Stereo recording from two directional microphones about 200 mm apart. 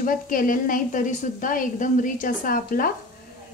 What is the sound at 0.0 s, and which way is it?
Speech, 45° left (ahead or behind).